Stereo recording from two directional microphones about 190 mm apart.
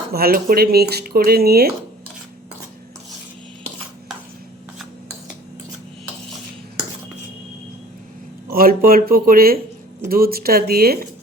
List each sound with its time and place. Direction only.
0.1 s speech: 55° right (ahead or behind)
8.4 s speech: 50° right (ahead or behind)